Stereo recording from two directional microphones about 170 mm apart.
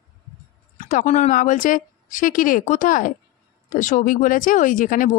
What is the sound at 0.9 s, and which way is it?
Speech, 45° left (ahead or behind).